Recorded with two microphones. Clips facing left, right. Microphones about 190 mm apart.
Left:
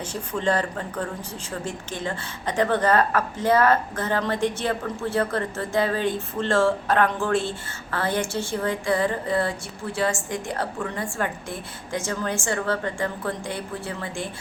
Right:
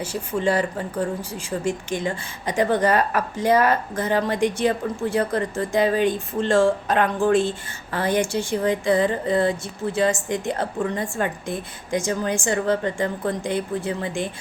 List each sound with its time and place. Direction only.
0.0 s a woman's voice: 10° right (ahead or behind)